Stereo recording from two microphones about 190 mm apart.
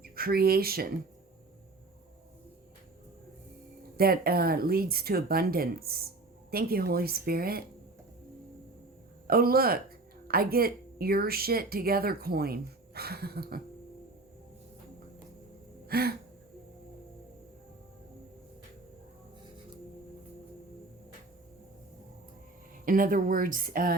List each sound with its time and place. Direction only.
0.0 s speech: 50° right (ahead or behind)
3.9 s speech: 50° right (ahead or behind)
9.2 s speech: 50° right (ahead or behind)
15.9 s gasp: 55° right (ahead or behind)
22.9 s speech: 45° right (ahead or behind)